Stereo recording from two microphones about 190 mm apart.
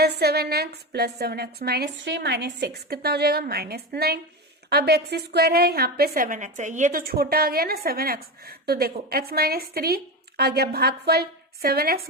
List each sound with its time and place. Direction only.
0.0 s a woman's voice: 55° right (ahead or behind)